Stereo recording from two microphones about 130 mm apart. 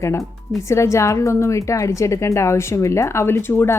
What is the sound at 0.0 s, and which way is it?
A woman's voice, 20° left (ahead or behind).